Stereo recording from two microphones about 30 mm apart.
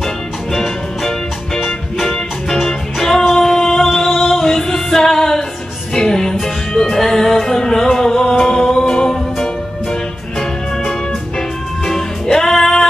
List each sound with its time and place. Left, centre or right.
0.5 s music: centre
3.3 s singing: centre
4.2 s music: centre
5.9 s music: left
12.3 s music: centre